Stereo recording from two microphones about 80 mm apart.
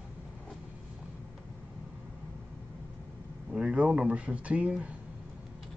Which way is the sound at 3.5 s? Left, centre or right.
Centre.